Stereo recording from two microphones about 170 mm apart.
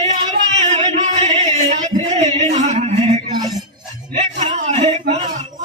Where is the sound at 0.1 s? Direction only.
40° right (ahead or behind).